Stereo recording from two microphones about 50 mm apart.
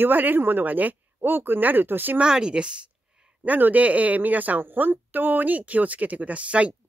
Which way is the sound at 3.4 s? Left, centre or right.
Right.